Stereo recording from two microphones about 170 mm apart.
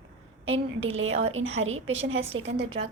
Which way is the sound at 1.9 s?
90° right.